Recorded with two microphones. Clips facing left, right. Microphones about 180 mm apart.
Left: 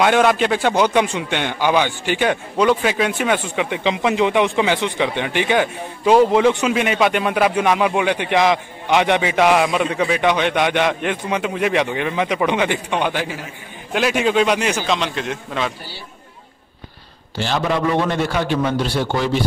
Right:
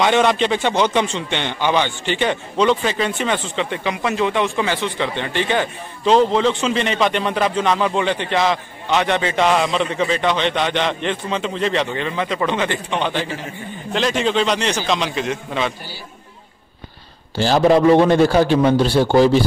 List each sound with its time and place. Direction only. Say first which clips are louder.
0.0 s a man's voice: left 1 dB; 5° left (ahead or behind)
17.4 s a man's voice: right 7 dB; 35° right (ahead or behind)